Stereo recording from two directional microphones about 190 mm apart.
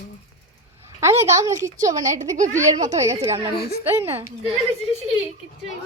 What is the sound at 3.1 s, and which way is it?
Speech, 35° right (ahead or behind).